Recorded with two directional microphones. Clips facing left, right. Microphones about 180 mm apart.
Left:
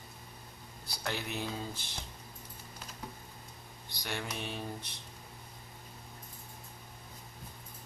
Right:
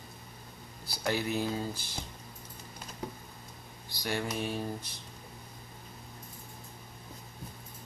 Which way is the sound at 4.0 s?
5° right (ahead or behind).